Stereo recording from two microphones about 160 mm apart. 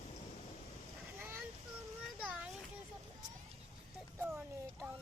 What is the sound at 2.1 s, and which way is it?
Children playing, 10° right (ahead or behind).